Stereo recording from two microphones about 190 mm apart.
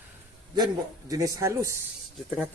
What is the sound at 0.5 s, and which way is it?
A man's voice, 20° right (ahead or behind).